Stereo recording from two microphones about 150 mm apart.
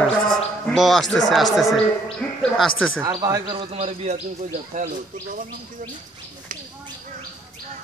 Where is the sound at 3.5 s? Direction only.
45° right (ahead or behind).